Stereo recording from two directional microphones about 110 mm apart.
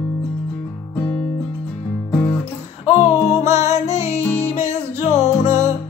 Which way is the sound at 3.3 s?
30° right (ahead or behind).